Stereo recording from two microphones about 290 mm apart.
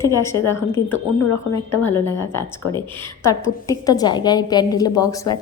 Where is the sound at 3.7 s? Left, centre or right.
Centre.